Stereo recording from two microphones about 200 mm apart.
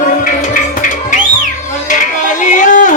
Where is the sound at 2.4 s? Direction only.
40° left (ahead or behind).